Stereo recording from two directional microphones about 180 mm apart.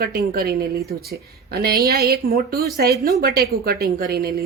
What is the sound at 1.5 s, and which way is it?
A woman's voice, 60° right (ahead or behind).